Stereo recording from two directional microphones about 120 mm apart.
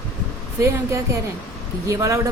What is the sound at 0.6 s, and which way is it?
Speech, 25° right (ahead or behind).